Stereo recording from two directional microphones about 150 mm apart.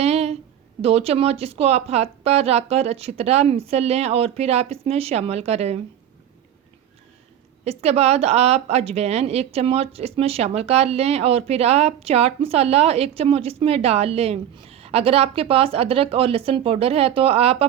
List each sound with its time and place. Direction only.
0.0 s a sound: 45° right (ahead or behind)
0.8 s speech: 40° right (ahead or behind)
7.6 s speech: 45° right (ahead or behind)